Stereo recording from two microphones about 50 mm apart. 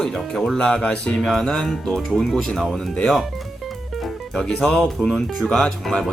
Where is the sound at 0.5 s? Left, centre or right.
Centre.